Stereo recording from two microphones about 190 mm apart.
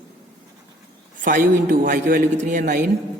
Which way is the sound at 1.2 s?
45° right (ahead or behind).